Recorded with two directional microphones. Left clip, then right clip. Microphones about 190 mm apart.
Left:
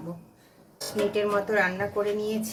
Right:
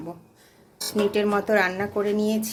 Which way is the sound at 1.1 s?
50° right (ahead or behind).